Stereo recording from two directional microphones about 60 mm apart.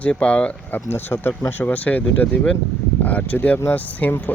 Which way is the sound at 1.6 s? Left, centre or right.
Left.